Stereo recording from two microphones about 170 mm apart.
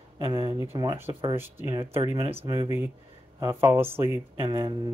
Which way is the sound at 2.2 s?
35° right (ahead or behind).